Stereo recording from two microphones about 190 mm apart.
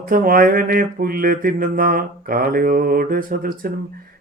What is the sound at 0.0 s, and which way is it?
Mantra, 50° right (ahead or behind).